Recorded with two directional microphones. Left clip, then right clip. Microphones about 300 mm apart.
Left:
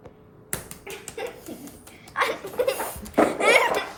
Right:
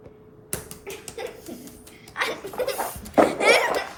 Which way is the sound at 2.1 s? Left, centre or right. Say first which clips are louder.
Left 3 dB; centre.